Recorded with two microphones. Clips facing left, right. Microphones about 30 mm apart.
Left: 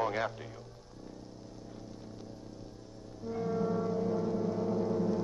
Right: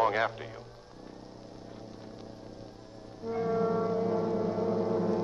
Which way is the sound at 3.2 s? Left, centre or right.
Right.